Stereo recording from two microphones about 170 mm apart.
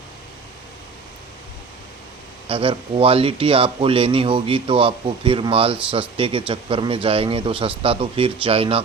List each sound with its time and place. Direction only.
2.5 s speech: 30° right (ahead or behind)